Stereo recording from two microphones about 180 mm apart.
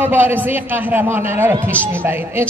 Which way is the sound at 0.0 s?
10° right (ahead or behind).